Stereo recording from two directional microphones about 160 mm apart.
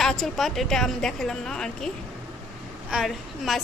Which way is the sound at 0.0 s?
Centre (ahead or behind).